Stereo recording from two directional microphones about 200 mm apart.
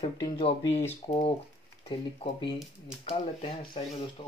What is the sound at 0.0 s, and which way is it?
Speech, 30° left (ahead or behind).